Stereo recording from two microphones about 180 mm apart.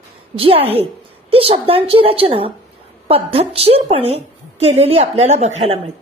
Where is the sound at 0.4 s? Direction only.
30° right (ahead or behind).